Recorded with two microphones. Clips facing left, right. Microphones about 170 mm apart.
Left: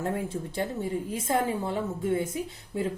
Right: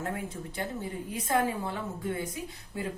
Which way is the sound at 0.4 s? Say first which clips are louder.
Left 5 dB; 30° left (ahead or behind).